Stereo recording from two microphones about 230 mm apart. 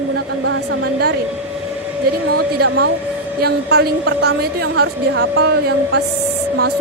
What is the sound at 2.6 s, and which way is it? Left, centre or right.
Speech, right.